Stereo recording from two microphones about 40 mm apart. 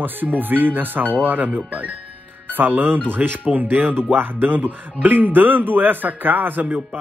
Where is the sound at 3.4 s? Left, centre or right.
Right.